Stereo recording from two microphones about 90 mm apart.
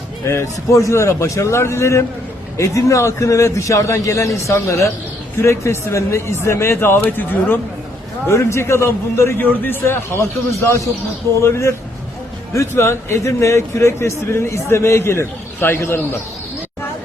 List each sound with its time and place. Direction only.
0.3 s a man's voice: 35° left (ahead or behind)